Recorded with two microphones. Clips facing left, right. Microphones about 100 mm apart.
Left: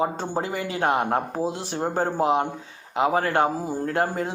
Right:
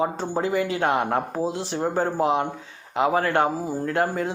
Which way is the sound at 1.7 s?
50° left (ahead or behind).